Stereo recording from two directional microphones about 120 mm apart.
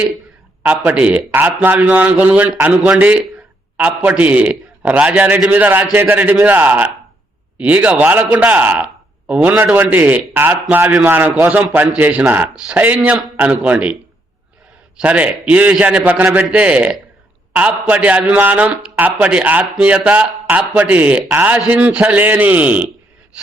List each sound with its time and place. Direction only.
0.6 s a man's voice: 10° right (ahead or behind)
15.0 s a man's voice: 10° right (ahead or behind)